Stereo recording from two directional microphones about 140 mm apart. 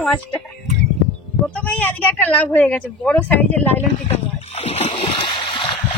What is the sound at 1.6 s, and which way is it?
Speech, 10° left (ahead or behind).